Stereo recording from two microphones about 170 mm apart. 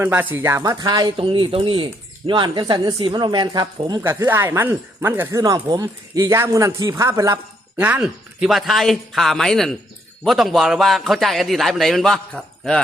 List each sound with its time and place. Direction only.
0.0 s a man's voice: 10° right (ahead or behind); by 12.8 s 5° left (ahead or behind)